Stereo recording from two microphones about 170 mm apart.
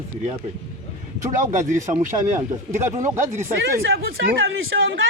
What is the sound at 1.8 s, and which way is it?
Speech, 45° right (ahead or behind).